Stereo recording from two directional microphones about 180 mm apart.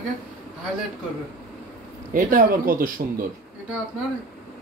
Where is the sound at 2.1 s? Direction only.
50° right (ahead or behind).